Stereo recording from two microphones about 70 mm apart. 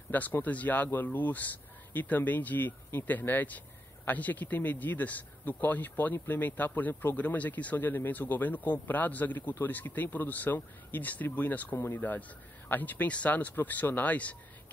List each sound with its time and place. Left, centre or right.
0.1 s speech: left